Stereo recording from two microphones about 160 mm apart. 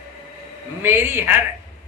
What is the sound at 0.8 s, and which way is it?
Speech, 15° right (ahead or behind).